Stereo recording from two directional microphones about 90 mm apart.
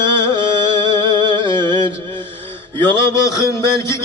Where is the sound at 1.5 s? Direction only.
60° right (ahead or behind).